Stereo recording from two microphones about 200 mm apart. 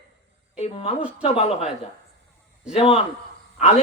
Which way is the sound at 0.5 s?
30° left (ahead or behind).